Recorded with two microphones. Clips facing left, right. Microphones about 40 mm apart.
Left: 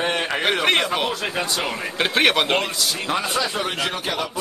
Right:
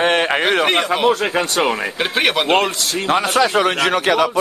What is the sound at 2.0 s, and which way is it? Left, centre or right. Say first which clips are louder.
Speech: left 1 dB; centre.